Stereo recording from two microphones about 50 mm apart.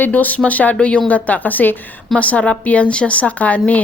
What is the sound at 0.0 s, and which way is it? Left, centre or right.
A woman's voice, left.